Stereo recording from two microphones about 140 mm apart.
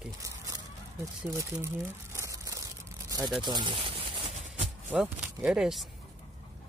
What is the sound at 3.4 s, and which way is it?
Speech, 35° right (ahead or behind).